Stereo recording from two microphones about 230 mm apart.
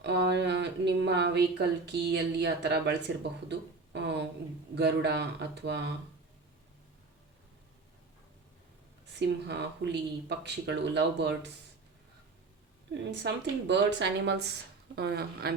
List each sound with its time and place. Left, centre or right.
0.0 s a sound: right
4.7 s speech: right
9.1 s speech: right
12.9 s speech: right